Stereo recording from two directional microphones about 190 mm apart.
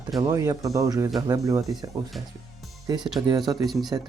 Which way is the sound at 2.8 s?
25° right (ahead or behind).